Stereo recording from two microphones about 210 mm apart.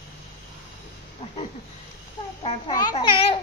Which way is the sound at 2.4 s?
25° left (ahead or behind).